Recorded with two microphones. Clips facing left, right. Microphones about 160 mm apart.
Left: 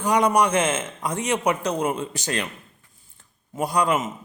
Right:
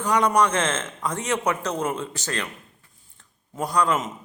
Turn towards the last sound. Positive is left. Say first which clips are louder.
# left 1 dB
turn(degrees=10)  # may be behind; listen again after turning